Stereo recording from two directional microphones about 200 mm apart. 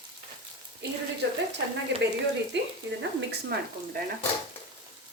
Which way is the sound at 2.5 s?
60° right (ahead or behind).